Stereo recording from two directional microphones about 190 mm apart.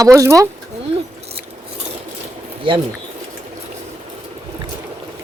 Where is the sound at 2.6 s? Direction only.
25° right (ahead or behind).